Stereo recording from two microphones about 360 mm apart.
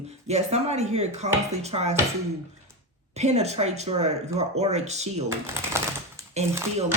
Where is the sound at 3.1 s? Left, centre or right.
Centre.